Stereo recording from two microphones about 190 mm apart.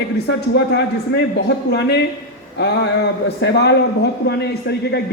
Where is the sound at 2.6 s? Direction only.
60° left (ahead or behind).